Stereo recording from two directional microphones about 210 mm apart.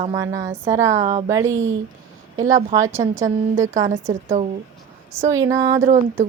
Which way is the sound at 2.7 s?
15° right (ahead or behind).